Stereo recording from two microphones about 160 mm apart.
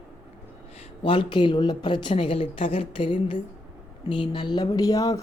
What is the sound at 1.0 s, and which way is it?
Speech, 30° left (ahead or behind).